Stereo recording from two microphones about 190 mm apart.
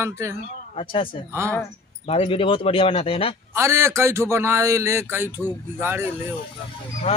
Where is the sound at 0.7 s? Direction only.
25° left (ahead or behind).